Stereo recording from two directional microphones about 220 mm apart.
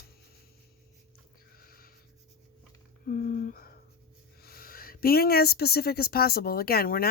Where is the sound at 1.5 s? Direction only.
40° left (ahead or behind).